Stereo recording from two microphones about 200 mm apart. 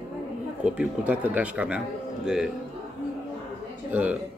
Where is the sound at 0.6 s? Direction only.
5° right (ahead or behind).